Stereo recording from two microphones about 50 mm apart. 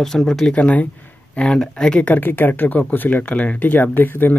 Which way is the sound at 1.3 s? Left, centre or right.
Centre.